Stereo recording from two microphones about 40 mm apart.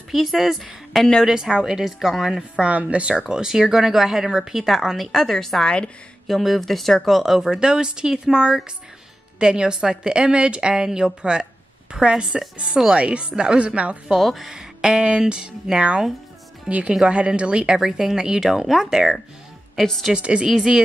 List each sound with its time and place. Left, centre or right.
0.1 s speech: centre
2.6 s speech: right
3.3 s speech: centre
5.1 s a woman's voice: centre
6.2 s speech: centre
7.3 s a woman's voice: centre
12.5 s a woman's voice: right
14.1 s speech: centre
14.5 s a woman's voice: centre
16.6 s a woman's voice: right
17.7 s speech: centre
20.2 s a woman's voice: right
20.4 s speech: centre